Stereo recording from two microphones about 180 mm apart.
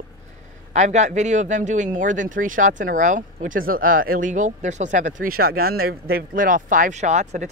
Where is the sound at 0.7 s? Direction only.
40° right (ahead or behind).